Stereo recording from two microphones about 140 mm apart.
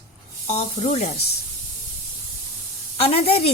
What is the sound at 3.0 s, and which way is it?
Speech, 45° left (ahead or behind).